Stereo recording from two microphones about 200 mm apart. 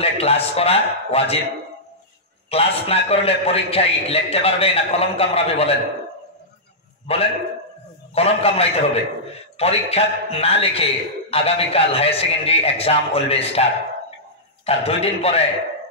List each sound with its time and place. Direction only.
0.0 s a man's voice: 30° left (ahead or behind)
2.5 s a man's voice: 30° left (ahead or behind)
7.1 s a man's voice: 30° left (ahead or behind)
14.7 s a man's voice: 30° left (ahead or behind)